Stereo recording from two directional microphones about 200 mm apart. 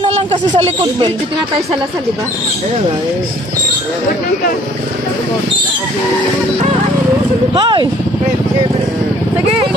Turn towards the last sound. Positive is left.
turn(degrees=-20)  # may be behind; listen again after turning